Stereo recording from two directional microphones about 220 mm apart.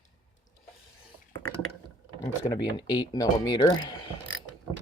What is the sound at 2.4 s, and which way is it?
Speech, 20° left (ahead or behind).